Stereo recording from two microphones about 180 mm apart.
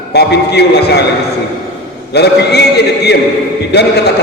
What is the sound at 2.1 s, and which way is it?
A man's voice, 65° left (ahead or behind).